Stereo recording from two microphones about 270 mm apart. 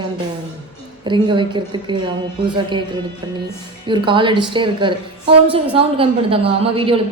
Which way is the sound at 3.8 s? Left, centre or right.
Centre.